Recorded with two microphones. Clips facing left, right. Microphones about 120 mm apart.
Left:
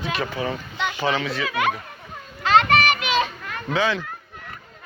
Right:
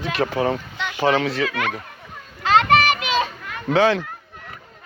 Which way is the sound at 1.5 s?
15° left (ahead or behind).